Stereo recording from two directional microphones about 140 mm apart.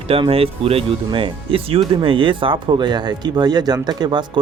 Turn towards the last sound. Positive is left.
turn(degrees=-30)  # may be behind; listen again after turning